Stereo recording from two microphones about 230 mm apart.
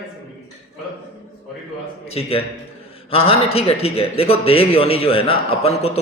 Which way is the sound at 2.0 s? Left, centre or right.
Left.